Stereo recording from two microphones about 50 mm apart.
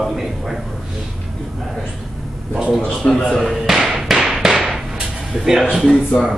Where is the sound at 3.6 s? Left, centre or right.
Centre.